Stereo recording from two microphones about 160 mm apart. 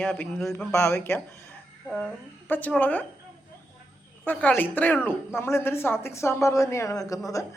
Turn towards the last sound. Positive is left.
turn(degrees=20)  # may be behind; listen again after turning